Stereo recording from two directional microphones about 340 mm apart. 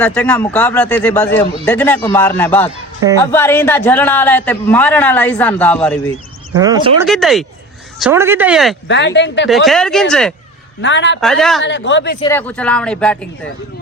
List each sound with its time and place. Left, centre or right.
0.0 s a man's voice: centre
6.6 s speech: centre
7.1 s a man's voice: centre
8.9 s speech: left
9.5 s a man's voice: centre
10.8 s speech: left
11.2 s a man's voice: centre
11.6 s speech: left
12.2 s a man's voice: centre